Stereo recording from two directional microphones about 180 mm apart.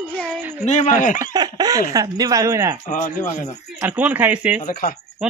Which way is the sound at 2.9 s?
45° left (ahead or behind).